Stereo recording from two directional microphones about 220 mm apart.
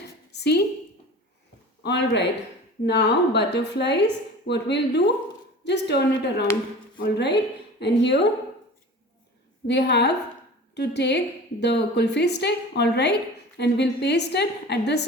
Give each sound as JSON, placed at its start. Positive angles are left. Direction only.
{"t": 0.3, "sound": "a sound", "side_deg": 50}
{"t": 1.8, "sound": "a woman's voice", "side_deg": 50}
{"t": 9.6, "sound": "a woman's voice", "side_deg": 50}